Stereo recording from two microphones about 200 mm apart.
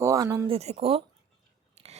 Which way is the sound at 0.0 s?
15° right (ahead or behind).